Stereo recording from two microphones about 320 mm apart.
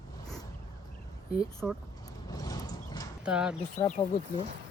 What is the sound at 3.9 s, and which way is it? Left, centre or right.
Speech, centre.